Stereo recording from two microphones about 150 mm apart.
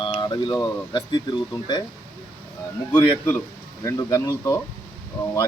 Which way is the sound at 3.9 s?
25° left (ahead or behind).